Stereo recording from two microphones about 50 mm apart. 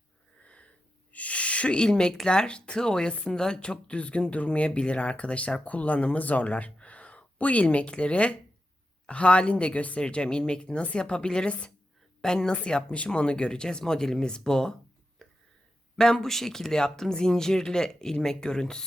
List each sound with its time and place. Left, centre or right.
0.4 s sniff: left
1.1 s a sound: left
2.2 s a woman's voice: centre
16.0 s speech: centre